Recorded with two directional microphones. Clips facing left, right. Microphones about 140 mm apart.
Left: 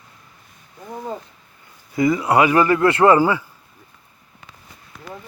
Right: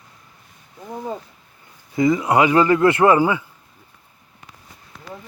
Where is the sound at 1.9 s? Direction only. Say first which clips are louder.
Even; 20° right (ahead or behind).